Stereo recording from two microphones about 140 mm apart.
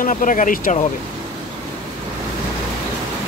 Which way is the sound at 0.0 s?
70° left (ahead or behind).